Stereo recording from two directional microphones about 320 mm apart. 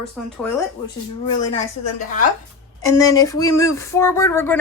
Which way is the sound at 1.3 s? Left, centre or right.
Left.